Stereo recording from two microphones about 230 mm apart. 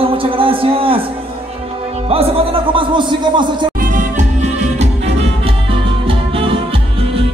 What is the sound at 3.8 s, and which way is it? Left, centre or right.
Music, right.